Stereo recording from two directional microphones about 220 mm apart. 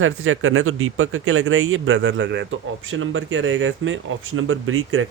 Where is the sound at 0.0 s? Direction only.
65° right (ahead or behind).